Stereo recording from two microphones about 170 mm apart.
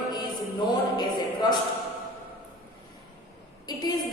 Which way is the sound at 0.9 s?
25° left (ahead or behind).